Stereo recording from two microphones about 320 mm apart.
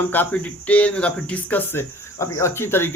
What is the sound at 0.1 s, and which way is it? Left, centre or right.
Speech, centre.